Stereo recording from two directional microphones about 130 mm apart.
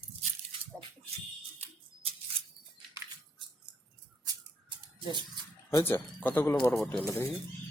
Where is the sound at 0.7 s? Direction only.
5° right (ahead or behind).